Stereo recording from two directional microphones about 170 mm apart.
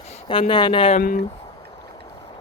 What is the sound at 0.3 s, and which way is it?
Speech, 30° left (ahead or behind).